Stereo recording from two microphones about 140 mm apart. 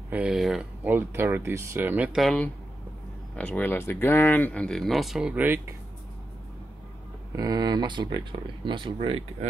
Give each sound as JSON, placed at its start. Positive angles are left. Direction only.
{"t": 0.1, "sound": "speech", "side_deg": -10}
{"t": 0.8, "sound": "speech", "side_deg": -15}
{"t": 3.3, "sound": "speech", "side_deg": 10}
{"t": 7.3, "sound": "speech", "side_deg": -25}